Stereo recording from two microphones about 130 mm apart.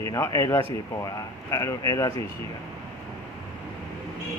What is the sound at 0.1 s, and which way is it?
Speech, 25° left (ahead or behind).